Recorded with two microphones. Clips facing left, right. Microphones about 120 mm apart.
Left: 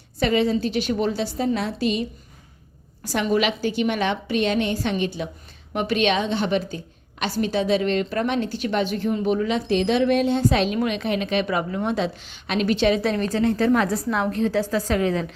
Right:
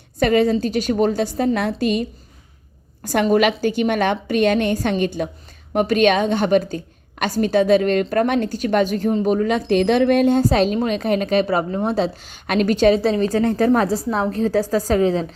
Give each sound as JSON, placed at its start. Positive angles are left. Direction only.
{"t": 0.2, "sound": "a woman's voice", "side_deg": -50}